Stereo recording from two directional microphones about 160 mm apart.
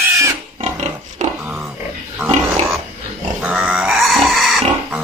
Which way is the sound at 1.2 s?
45° right (ahead or behind).